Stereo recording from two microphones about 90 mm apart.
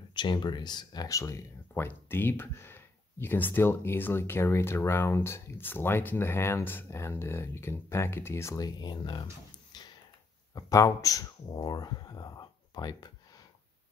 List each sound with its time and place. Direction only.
0.1 s speech: 60° left (ahead or behind)
1.0 s speech: 35° left (ahead or behind)
8.5 s speech: 50° left (ahead or behind)
10.5 s speech: 40° left (ahead or behind); by 13.1 s 55° left (ahead or behind)